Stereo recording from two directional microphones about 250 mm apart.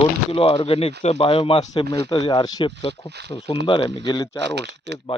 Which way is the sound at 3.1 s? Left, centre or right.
Right.